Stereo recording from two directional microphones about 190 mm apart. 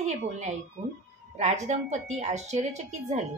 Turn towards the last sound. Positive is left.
turn(degrees=-35)  # may be behind; listen again after turning